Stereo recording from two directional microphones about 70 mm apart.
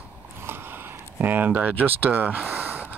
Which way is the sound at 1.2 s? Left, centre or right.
Right.